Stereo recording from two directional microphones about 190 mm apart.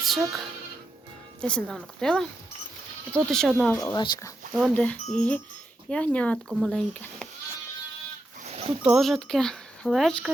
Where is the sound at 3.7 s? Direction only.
20° left (ahead or behind).